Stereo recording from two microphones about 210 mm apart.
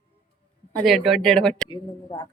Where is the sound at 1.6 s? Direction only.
20° left (ahead or behind).